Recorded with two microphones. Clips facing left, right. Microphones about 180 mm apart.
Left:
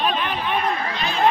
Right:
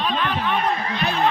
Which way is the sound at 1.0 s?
60° right (ahead or behind).